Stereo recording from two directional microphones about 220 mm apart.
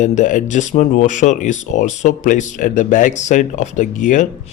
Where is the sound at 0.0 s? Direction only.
35° left (ahead or behind).